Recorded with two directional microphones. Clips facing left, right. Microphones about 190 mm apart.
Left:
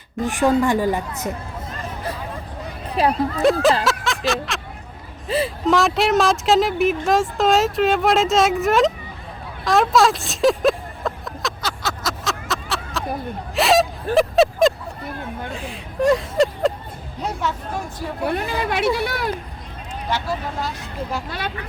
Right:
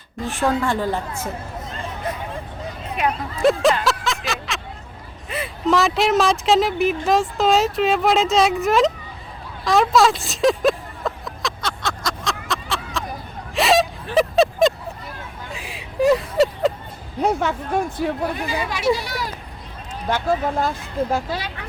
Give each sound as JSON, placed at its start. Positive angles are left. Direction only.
{"t": 0.3, "sound": "a woman's voice", "side_deg": 15}
{"t": 2.9, "sound": "speech", "side_deg": 35}
{"t": 3.8, "sound": "a sound", "side_deg": 0}
{"t": 4.3, "sound": "speech", "side_deg": 0}
{"t": 5.6, "sound": "speech", "side_deg": 0}
{"t": 9.6, "sound": "a sound", "side_deg": 0}
{"t": 13.6, "sound": "whimper", "side_deg": 0}
{"t": 14.2, "sound": "a sound", "side_deg": 0}
{"t": 15.5, "sound": "vehicle", "side_deg": -10}
{"t": 17.2, "sound": "speech", "side_deg": -55}
{"t": 18.3, "sound": "speech", "side_deg": 60}
{"t": 20.1, "sound": "speech", "side_deg": -50}
{"t": 21.2, "sound": "speech", "side_deg": 55}